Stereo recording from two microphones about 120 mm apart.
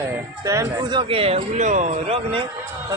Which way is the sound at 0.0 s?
25° right (ahead or behind).